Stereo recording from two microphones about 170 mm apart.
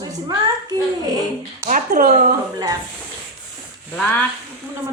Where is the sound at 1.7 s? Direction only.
55° right (ahead or behind).